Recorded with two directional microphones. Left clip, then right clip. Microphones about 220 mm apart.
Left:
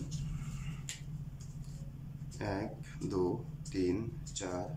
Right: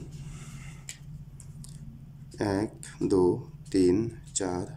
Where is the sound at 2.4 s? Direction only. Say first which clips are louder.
Right 9 dB; 30° right (ahead or behind).